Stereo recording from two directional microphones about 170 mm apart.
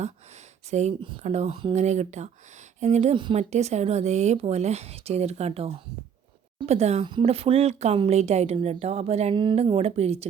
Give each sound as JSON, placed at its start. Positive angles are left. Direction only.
{"t": 0.7, "sound": "speech", "side_deg": -40}
{"t": 1.7, "sound": "speech", "side_deg": -45}
{"t": 7.0, "sound": "speech", "side_deg": -30}